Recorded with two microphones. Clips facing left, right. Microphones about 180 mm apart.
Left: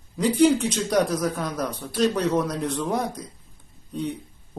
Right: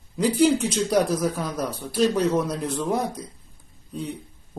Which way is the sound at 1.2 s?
5° right (ahead or behind).